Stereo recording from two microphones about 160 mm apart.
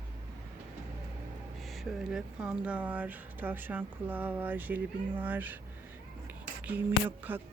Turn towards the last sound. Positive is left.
turn(degrees=-10)  # may be behind; listen again after turning